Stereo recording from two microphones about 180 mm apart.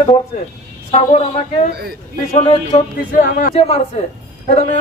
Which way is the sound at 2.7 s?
45° left (ahead or behind).